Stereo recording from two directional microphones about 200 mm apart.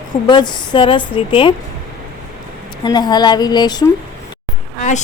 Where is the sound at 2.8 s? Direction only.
20° left (ahead or behind).